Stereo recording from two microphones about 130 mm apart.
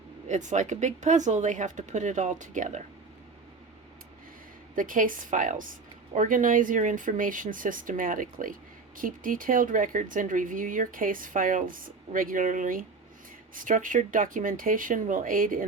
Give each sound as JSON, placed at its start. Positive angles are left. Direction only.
{"t": 0.3, "sound": "speech", "side_deg": -70}
{"t": 4.7, "sound": "speech", "side_deg": -90}